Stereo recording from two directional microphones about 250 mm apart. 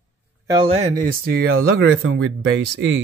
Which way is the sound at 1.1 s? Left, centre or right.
Right.